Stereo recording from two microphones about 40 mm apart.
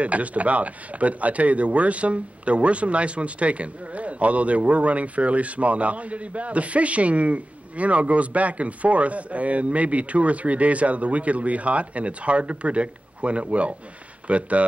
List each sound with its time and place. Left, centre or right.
0.0 s speech: right